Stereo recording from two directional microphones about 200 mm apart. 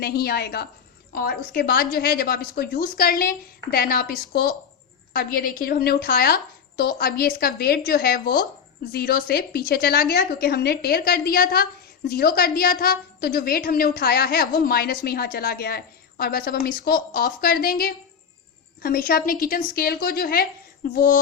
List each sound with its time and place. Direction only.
0.0 s a woman's voice: 50° left (ahead or behind)